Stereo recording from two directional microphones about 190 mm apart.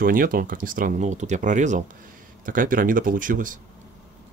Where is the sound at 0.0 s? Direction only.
50° right (ahead or behind).